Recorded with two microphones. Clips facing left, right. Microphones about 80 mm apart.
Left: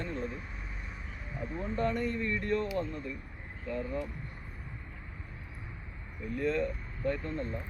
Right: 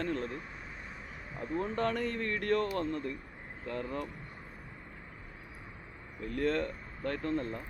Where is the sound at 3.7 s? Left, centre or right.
Right.